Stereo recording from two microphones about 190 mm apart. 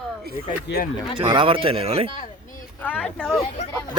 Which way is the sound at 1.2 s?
25° right (ahead or behind).